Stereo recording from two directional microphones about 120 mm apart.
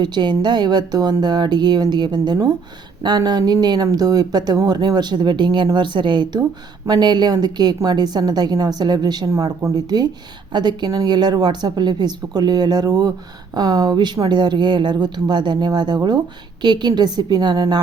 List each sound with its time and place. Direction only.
0.0 s speech: 35° right (ahead or behind)